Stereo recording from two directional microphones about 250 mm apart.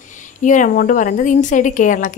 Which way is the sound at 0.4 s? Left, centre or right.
Left.